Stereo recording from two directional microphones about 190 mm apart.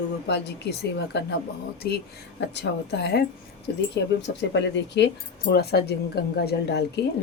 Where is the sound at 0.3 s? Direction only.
60° left (ahead or behind).